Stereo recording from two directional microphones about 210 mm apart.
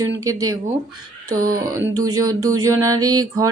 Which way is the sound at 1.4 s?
40° right (ahead or behind).